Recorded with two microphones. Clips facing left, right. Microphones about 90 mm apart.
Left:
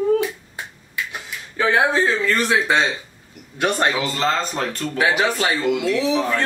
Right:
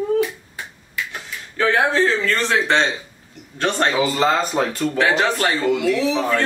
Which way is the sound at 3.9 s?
5° right (ahead or behind).